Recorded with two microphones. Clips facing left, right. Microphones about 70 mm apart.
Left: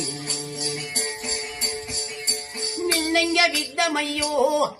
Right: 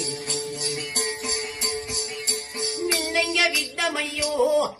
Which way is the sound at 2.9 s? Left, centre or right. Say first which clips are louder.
Left 4 dB; left.